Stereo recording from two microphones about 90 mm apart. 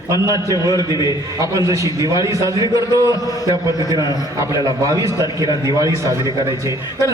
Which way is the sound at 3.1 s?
40° left (ahead or behind).